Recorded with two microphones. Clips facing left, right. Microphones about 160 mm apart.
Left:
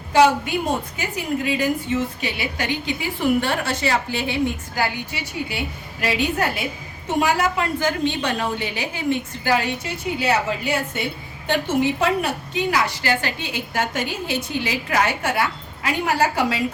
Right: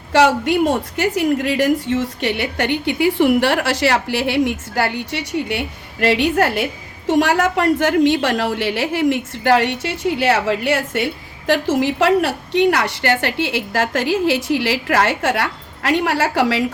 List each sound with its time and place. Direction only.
0.1 s a woman's voice: 80° right
1.9 s a woman's voice: 65° right (ahead or behind)
7.1 s a woman's voice: 90° right
7.4 s a woman's voice: 75° right (ahead or behind)